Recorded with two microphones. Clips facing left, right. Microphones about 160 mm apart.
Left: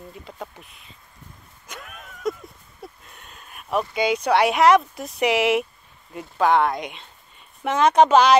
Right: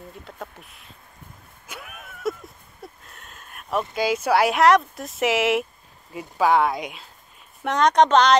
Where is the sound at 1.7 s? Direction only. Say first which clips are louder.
Even; 5° right (ahead or behind).